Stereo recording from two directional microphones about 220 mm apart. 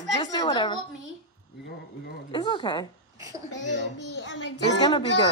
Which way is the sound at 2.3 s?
20° left (ahead or behind).